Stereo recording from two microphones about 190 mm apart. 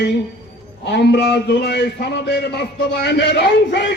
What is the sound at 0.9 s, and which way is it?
A man's voice, 60° left (ahead or behind).